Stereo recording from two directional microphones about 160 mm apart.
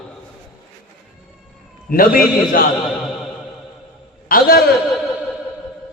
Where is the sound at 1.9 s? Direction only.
65° left (ahead or behind).